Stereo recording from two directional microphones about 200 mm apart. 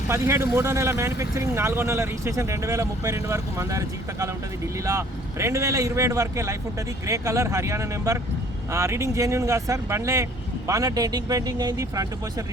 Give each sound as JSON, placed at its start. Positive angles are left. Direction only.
{"t": 0.1, "sound": "a man's voice", "side_deg": -15}